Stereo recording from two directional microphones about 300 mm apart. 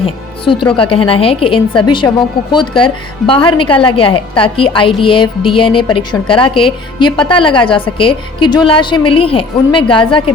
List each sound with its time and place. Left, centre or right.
0.0 s a woman's voice: centre